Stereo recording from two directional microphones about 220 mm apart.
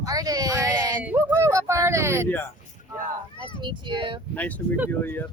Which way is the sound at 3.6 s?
20° right (ahead or behind).